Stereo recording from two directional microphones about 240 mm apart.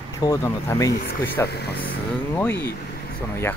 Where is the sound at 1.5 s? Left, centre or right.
Left.